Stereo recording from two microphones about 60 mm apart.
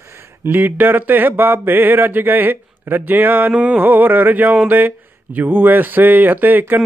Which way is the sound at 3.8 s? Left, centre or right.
Right.